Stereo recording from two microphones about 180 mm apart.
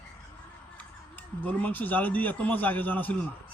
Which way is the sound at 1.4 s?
10° left (ahead or behind).